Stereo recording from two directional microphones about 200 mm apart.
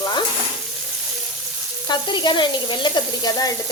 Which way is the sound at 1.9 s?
20° left (ahead or behind).